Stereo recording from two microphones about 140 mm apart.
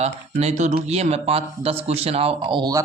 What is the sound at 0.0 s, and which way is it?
Speech, 50° right (ahead or behind).